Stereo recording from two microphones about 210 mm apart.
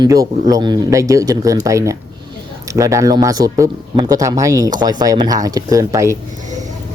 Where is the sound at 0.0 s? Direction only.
15° right (ahead or behind).